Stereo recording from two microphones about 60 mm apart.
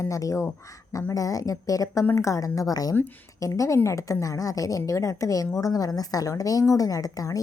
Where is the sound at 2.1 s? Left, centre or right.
Left.